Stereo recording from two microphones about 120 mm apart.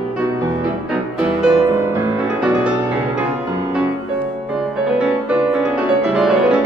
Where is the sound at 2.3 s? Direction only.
10° right (ahead or behind).